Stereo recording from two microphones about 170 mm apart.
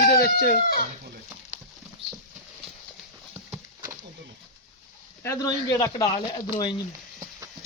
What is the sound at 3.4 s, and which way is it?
Horse, 15° right (ahead or behind).